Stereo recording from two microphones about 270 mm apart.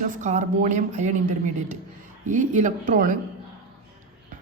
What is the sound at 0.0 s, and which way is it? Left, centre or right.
A woman's voice, right.